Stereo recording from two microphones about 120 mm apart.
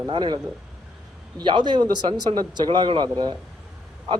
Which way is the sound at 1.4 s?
40° right (ahead or behind).